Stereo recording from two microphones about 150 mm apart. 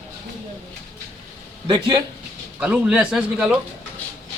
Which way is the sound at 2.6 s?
5° right (ahead or behind).